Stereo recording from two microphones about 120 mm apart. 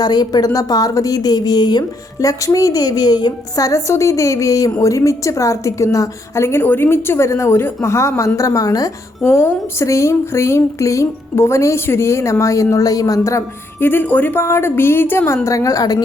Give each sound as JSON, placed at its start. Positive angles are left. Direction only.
{"t": 0.0, "sound": "a woman's voice", "side_deg": 35}